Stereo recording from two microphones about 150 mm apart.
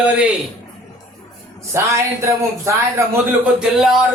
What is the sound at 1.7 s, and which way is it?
Speech, 20° right (ahead or behind).